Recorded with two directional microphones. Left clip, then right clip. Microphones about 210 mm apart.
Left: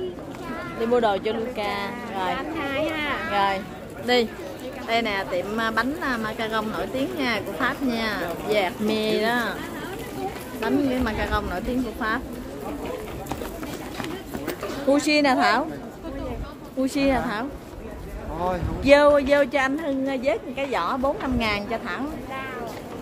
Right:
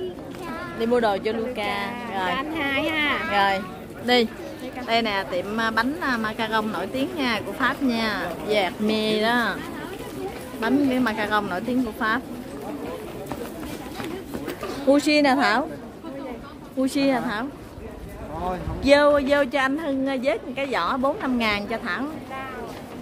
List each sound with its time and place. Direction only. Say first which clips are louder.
0.7 s a woman's voice: even; 15° right (ahead or behind)
2.3 s speech: right 2 dB; 45° right (ahead or behind)
3.3 s speech: right 2 dB; 20° right (ahead or behind)
10.6 s speech: right 2 dB; 25° right (ahead or behind)
14.9 s speech: right 1 dB; 20° right (ahead or behind)
16.8 s a woman's voice: even; 15° right (ahead or behind)
18.8 s a woman's voice: left 1 dB; 10° right (ahead or behind)